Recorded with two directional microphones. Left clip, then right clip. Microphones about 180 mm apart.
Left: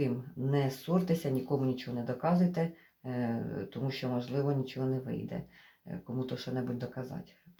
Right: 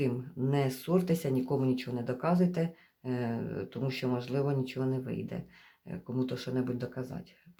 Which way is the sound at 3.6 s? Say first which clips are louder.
Right 3 dB; 35° right (ahead or behind).